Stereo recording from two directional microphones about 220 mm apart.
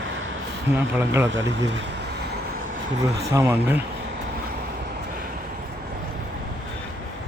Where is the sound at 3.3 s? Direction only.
10° right (ahead or behind).